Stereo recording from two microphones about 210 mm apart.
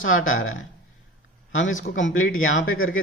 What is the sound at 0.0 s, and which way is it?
Speech, 70° left (ahead or behind).